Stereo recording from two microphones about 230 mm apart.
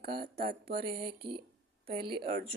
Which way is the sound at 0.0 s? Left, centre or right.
Right.